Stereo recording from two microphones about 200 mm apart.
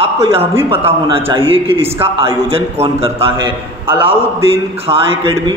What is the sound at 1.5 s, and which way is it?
A man's voice, 30° right (ahead or behind).